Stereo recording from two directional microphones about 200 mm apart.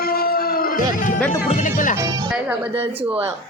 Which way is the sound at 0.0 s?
50° left (ahead or behind).